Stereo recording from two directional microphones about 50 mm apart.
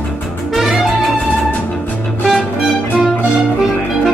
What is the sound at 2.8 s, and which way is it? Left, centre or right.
Music, left.